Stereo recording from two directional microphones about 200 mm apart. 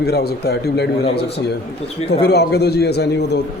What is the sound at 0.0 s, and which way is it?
A man's voice, 55° left (ahead or behind).